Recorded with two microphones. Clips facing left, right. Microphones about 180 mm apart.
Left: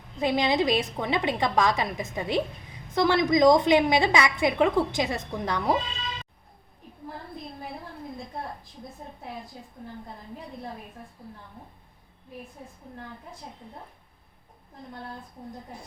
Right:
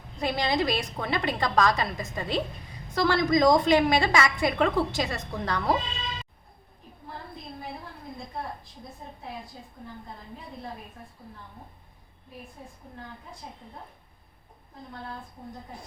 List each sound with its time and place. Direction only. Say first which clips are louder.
0.2 s a woman's voice: left 3 dB; 20° left (ahead or behind)